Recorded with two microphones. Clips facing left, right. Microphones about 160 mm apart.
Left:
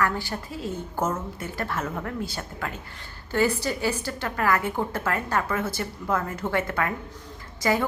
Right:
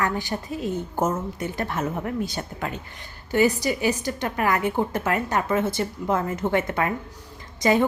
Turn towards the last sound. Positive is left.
turn(degrees=-20)  # may be behind; listen again after turning